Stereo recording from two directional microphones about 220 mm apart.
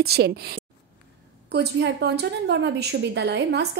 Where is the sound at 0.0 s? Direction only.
45° right (ahead or behind).